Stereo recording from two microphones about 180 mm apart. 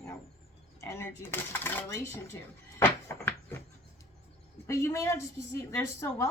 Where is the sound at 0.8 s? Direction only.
15° left (ahead or behind).